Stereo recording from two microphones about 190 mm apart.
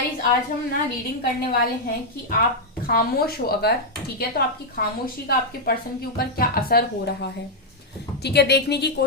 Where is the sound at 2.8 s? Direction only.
50° left (ahead or behind).